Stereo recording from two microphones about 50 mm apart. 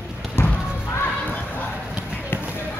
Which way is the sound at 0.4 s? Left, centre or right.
Left.